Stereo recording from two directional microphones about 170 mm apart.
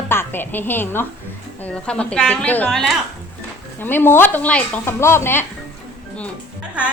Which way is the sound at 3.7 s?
10° left (ahead or behind).